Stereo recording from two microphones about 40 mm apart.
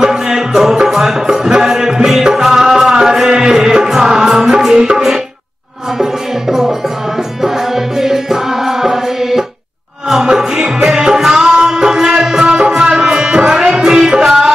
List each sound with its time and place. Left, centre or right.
0.0 s music: centre
7.4 s music: centre